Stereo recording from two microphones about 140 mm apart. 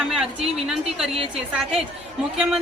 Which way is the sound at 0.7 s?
5° right (ahead or behind).